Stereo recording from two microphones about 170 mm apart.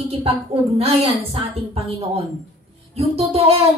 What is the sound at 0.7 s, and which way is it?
Speech, 35° right (ahead or behind).